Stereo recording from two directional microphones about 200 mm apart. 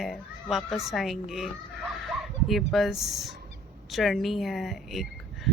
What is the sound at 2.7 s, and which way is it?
A woman's voice, centre (ahead or behind).